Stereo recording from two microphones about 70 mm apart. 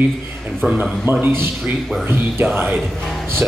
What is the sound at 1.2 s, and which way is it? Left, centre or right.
A man's voice, right.